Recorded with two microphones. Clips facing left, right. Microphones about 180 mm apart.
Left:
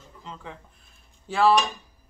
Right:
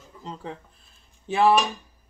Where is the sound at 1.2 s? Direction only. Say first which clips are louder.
Right 1 dB; 20° right (ahead or behind).